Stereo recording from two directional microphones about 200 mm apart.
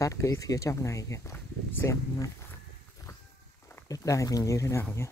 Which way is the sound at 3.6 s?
15° left (ahead or behind).